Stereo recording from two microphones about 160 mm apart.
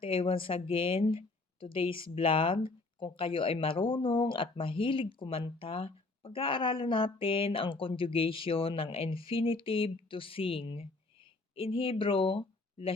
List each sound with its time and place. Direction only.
0.0 s speech: 35° left (ahead or behind)